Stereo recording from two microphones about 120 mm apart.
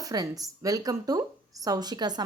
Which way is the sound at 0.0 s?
30° right (ahead or behind).